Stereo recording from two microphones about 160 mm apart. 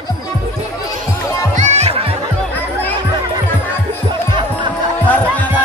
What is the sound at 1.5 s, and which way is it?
Music, 45° right (ahead or behind).